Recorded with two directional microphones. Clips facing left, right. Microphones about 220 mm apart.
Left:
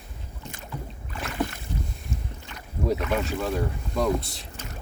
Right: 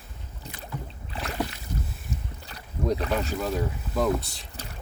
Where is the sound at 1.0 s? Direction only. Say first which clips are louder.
Right 1 dB; 35° right (ahead or behind).